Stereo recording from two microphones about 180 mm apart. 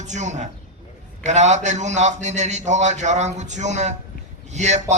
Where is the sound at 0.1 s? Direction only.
40° right (ahead or behind).